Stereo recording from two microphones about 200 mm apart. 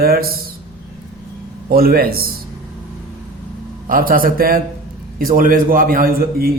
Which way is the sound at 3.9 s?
45° right (ahead or behind).